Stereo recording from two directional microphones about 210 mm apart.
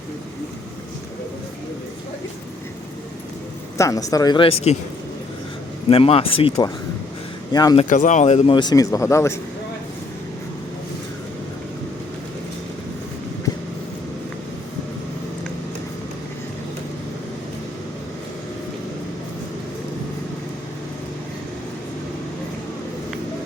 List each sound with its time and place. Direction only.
3.8 s speech: 15° left (ahead or behind)
5.9 s speech: 30° left (ahead or behind)
7.8 s speech: 35° left (ahead or behind); by 9.4 s 15° left (ahead or behind)